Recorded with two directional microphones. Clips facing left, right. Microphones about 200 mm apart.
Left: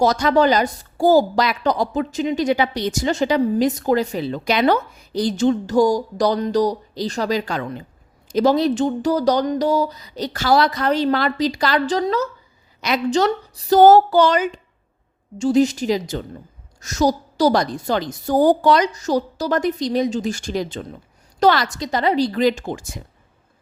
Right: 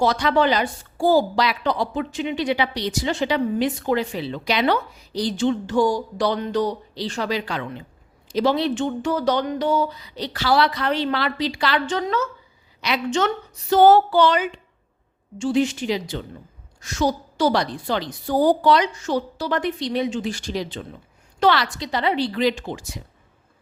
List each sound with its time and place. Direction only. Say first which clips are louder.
0.0 s a woman's voice: left 3 dB; 45° left (ahead or behind)